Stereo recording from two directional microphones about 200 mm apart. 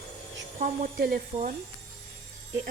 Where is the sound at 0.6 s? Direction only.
45° right (ahead or behind).